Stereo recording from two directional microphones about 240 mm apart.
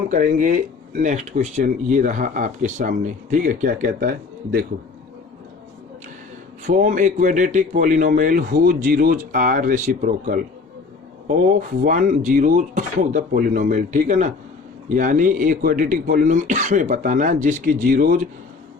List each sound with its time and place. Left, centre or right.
0.1 s speech: right
6.7 s speech: right
11.8 s speech: right